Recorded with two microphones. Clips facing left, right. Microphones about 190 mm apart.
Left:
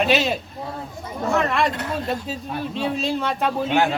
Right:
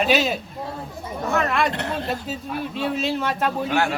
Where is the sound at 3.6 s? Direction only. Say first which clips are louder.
Left 4 dB; 20° left (ahead or behind).